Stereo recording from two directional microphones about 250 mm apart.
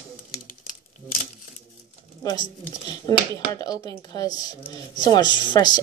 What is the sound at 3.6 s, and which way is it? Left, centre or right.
Speech, centre.